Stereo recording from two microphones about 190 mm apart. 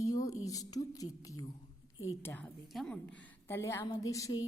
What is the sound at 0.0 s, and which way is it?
A woman's voice, 15° left (ahead or behind).